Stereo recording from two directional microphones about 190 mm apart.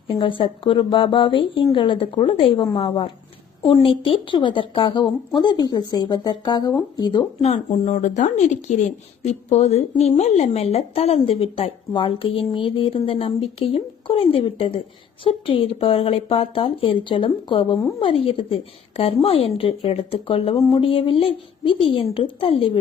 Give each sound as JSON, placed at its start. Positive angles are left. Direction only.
{"t": 0.1, "sound": "a woman's voice", "side_deg": 25}
{"t": 7.4, "sound": "a woman's voice", "side_deg": 40}